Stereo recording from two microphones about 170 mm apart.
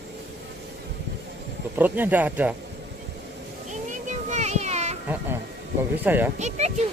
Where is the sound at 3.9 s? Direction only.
45° right (ahead or behind).